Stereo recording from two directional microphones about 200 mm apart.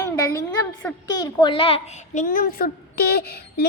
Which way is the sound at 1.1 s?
20° left (ahead or behind).